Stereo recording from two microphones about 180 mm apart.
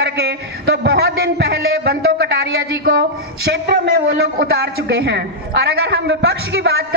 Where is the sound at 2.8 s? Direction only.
65° right (ahead or behind).